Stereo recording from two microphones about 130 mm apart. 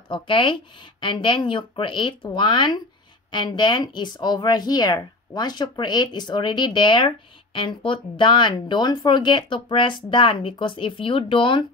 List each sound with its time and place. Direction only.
0.1 s speech: 40° left (ahead or behind)